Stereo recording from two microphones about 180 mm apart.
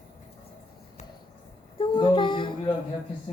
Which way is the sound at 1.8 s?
25° left (ahead or behind).